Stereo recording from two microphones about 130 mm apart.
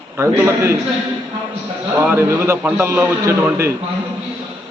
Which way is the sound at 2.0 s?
20° right (ahead or behind).